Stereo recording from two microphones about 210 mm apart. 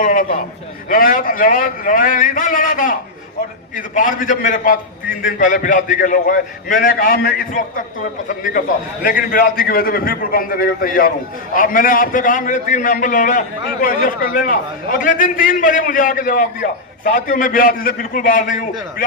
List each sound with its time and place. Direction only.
0.0 s a man's voice: 40° left (ahead or behind)
9.0 s a man's voice: 40° left (ahead or behind)